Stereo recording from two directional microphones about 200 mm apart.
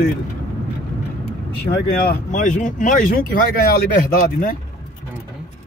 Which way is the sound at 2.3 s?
40° left (ahead or behind).